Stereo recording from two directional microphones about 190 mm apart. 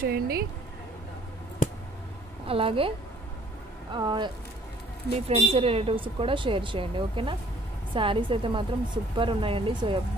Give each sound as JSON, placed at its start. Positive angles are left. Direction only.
{"t": 0.0, "sound": "speech", "side_deg": -50}
{"t": 1.6, "sound": "a sound", "side_deg": 45}
{"t": 2.4, "sound": "a woman's voice", "side_deg": -30}
{"t": 3.9, "sound": "speech", "side_deg": -25}
{"t": 5.3, "sound": "speech", "side_deg": -30}